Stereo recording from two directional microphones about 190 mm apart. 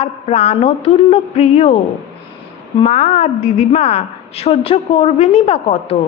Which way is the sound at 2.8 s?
35° left (ahead or behind).